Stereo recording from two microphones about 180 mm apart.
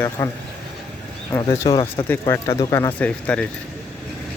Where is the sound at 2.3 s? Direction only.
15° left (ahead or behind).